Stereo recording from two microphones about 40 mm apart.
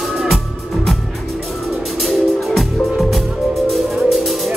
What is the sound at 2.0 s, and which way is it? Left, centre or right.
Music, centre.